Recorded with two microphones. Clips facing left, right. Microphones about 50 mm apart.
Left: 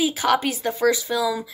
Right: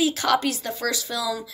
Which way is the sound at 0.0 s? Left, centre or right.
Centre.